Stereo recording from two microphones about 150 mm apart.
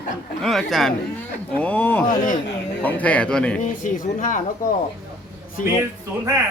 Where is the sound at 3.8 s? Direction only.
60° left (ahead or behind).